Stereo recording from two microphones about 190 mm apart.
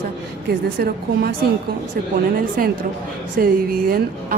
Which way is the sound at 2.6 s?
50° right (ahead or behind).